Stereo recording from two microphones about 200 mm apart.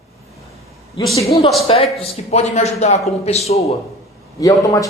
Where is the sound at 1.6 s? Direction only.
30° left (ahead or behind).